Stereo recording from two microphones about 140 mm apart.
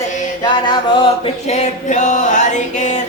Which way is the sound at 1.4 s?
55° left (ahead or behind).